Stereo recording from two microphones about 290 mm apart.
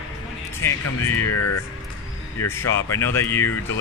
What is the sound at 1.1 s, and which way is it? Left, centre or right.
Speech, left.